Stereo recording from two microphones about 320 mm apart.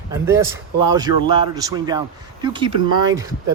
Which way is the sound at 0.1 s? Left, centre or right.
Centre.